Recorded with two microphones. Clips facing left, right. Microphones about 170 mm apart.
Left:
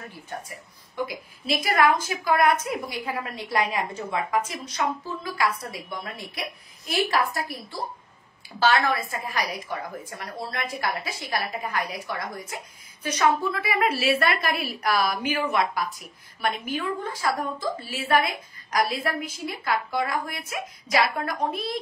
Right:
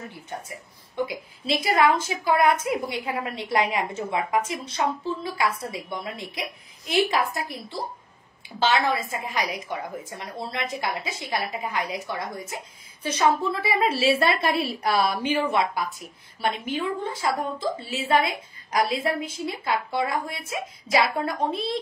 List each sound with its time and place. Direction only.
0.9 s a woman's voice: 25° right (ahead or behind)